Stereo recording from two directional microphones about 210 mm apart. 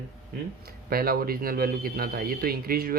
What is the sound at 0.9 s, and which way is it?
Speech, 45° right (ahead or behind).